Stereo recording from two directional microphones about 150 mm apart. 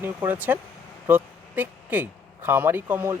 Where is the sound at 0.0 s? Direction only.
15° right (ahead or behind).